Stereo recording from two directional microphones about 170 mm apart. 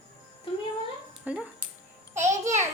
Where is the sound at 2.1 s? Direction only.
45° right (ahead or behind).